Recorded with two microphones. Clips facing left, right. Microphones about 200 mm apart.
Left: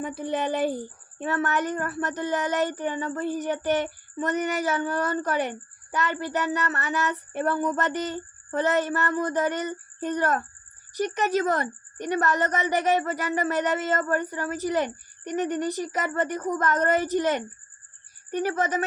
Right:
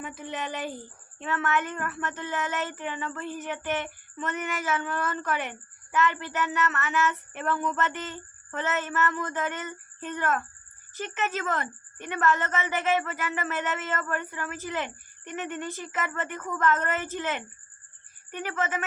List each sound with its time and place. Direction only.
1.2 s a woman's voice: 35° left (ahead or behind)